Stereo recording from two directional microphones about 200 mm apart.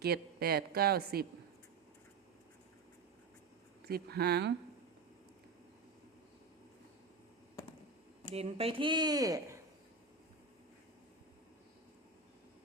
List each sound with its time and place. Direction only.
0.0 s a woman's voice: 50° right (ahead or behind)
3.8 s a woman's voice: 50° right (ahead or behind)
8.3 s speech: 30° right (ahead or behind)